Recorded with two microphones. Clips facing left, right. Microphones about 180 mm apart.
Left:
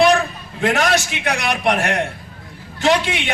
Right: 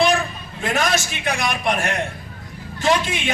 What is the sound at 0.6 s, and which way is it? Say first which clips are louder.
A man's voice: left 4 dB; 70° left (ahead or behind).